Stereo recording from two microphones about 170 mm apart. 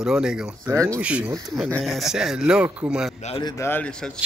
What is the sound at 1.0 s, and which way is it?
A man's voice, 5° right (ahead or behind).